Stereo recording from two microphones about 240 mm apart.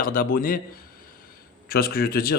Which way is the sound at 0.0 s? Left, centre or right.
Left.